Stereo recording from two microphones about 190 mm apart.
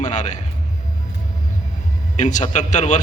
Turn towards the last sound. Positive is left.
turn(degrees=40)  # may be behind; listen again after turning